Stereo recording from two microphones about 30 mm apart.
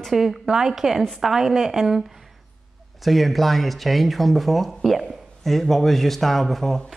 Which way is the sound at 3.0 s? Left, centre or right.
Centre.